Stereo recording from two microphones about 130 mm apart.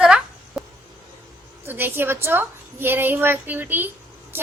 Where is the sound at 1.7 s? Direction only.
15° right (ahead or behind).